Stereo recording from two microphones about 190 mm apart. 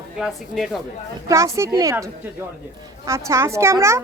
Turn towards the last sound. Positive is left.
turn(degrees=-15)  # may be behind; listen again after turning